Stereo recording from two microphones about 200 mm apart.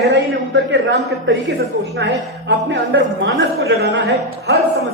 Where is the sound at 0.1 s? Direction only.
65° right (ahead or behind).